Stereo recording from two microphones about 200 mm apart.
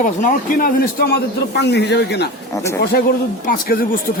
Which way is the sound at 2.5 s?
15° left (ahead or behind).